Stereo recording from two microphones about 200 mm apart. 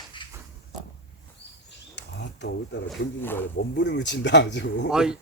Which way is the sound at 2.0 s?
60° left (ahead or behind).